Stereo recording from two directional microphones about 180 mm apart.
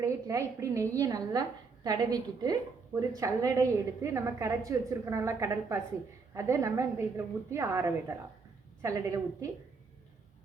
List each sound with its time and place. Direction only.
0.0 s a woman's voice: 15° right (ahead or behind)